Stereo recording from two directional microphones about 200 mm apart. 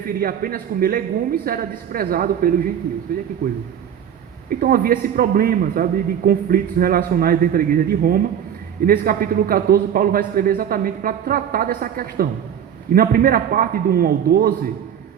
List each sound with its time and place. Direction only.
0.2 s a man's voice: 45° right (ahead or behind)
4.4 s a man's voice: 45° right (ahead or behind)